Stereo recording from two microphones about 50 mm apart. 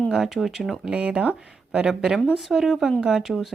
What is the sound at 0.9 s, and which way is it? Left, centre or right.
Speech, right.